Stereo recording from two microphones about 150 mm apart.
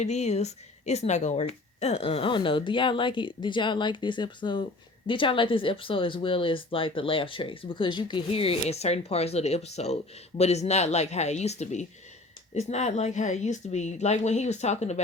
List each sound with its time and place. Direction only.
0.0 s speech: 50° left (ahead or behind)